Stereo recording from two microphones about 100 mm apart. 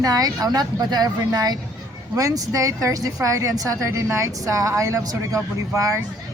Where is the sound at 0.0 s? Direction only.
40° right (ahead or behind).